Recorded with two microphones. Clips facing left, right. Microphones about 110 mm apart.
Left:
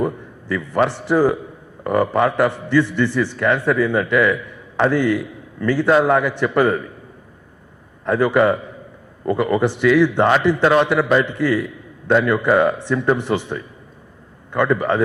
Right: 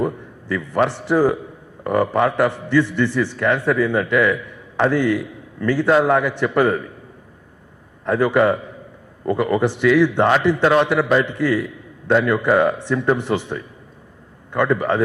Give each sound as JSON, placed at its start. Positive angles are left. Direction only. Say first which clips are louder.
{"t": 0.0, "sound": "a man's voice", "louder": "left 1 dB", "side_deg": 25}
{"t": 8.0, "sound": "a man's voice", "louder": "left 1 dB", "side_deg": 25}